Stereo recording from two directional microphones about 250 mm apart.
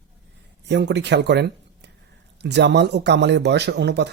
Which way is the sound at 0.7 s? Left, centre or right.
Right.